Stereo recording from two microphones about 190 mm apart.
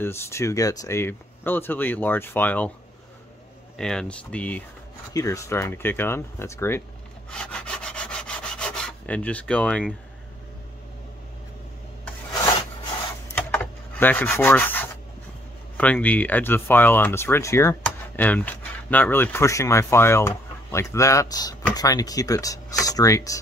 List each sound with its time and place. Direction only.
0.0 s speech: 15° left (ahead or behind)
3.7 s speech: 5° left (ahead or behind)
7.2 s rub: 5° left (ahead or behind)
13.3 s rub: 10° left (ahead or behind)
15.8 s speech: 10° left (ahead or behind)